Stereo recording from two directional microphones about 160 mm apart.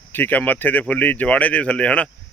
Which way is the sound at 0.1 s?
10° left (ahead or behind).